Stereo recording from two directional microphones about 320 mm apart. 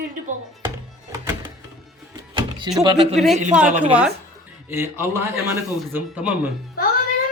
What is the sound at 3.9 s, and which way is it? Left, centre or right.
Speech, centre.